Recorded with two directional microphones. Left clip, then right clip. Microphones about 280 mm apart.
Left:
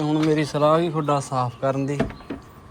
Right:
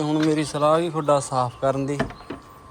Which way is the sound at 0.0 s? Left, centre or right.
Centre.